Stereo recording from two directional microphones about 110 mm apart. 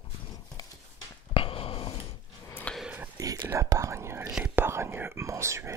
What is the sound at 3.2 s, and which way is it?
Whispering, 35° right (ahead or behind).